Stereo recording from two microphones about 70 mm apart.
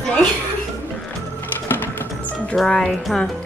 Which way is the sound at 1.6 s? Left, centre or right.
Left.